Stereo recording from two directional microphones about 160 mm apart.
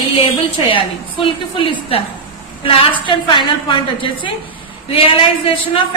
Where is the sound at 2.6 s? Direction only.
30° left (ahead or behind).